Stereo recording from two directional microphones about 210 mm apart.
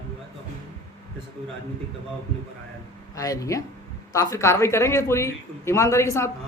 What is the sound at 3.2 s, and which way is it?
Speech, 15° left (ahead or behind).